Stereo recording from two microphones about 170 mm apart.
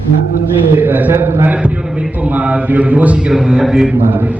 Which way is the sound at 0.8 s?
10° right (ahead or behind).